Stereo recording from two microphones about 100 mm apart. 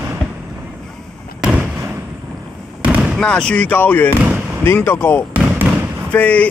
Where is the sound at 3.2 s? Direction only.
10° left (ahead or behind).